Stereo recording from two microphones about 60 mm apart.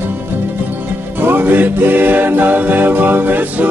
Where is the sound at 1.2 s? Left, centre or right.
Right.